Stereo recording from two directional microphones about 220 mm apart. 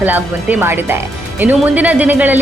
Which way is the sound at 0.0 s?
5° right (ahead or behind).